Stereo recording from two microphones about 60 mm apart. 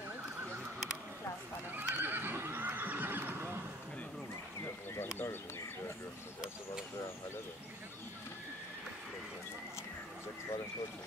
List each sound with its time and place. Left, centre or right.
1.8 s neigh: right
4.9 s bird: left